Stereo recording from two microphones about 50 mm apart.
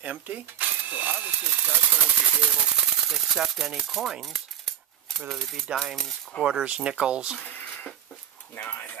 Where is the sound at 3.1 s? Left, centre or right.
Centre.